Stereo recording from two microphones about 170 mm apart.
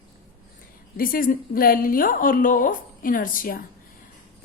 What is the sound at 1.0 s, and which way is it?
A woman's voice, 55° left (ahead or behind).